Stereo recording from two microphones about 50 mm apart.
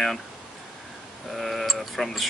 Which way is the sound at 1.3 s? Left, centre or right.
Centre.